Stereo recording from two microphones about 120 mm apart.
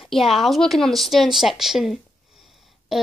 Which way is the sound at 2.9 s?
Centre (ahead or behind).